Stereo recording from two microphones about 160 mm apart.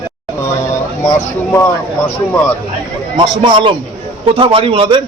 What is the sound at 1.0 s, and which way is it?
Speech, 15° left (ahead or behind).